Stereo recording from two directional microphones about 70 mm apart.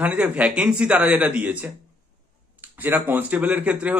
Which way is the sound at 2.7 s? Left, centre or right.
Right.